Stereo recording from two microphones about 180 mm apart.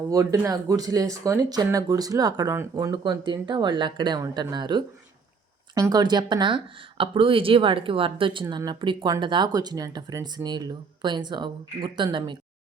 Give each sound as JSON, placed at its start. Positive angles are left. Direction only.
{"t": 0.1, "sound": "speech", "side_deg": -20}